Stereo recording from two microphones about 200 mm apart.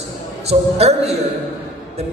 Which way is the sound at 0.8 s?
30° right (ahead or behind).